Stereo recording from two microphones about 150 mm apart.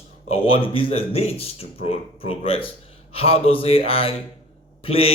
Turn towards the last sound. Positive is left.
turn(degrees=40)  # may be behind; listen again after turning